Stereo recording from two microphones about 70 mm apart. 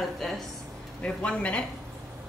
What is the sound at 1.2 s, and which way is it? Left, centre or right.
Speech, centre.